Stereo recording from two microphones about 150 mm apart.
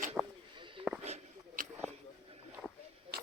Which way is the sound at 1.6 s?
65° right (ahead or behind).